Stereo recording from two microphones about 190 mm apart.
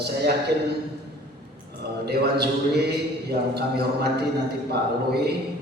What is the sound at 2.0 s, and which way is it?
A man's voice, 60° right (ahead or behind).